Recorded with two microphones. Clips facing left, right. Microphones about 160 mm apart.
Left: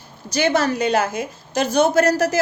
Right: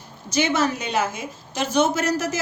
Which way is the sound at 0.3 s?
35° left (ahead or behind).